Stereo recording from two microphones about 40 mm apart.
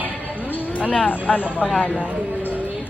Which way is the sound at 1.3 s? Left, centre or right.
Centre.